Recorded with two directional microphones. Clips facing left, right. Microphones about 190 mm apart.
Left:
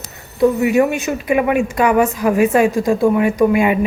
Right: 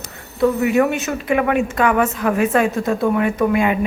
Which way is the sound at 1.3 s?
15° left (ahead or behind).